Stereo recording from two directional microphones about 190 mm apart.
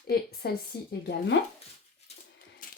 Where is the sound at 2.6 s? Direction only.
45° left (ahead or behind).